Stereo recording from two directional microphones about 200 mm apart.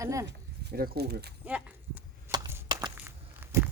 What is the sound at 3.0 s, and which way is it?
Walk, 15° right (ahead or behind).